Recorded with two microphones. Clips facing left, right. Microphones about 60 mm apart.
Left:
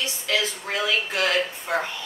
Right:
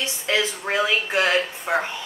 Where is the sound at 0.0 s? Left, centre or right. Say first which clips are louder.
Right 2 dB; right.